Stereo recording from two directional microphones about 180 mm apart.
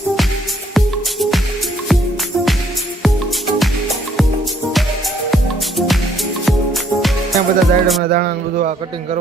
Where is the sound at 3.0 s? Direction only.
Centre (ahead or behind).